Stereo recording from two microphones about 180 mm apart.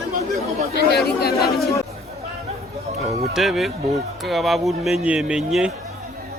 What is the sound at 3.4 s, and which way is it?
Speech, centre (ahead or behind).